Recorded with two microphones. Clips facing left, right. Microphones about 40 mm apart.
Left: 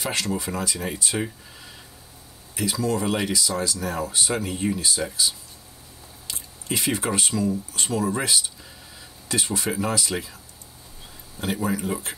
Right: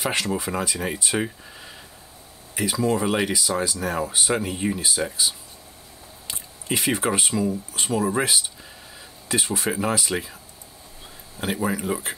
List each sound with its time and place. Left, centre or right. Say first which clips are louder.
0.0 s speech: right 2 dB; right
1.2 s speech: right 2 dB; centre
11.3 s speech: right 1 dB; centre